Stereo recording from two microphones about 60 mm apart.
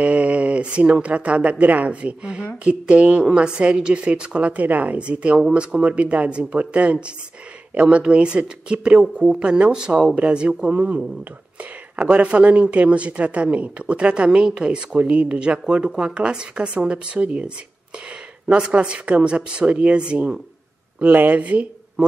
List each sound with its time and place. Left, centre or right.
0.0 s speech: right
12.0 s speech: right
18.5 s speech: centre
21.0 s speech: right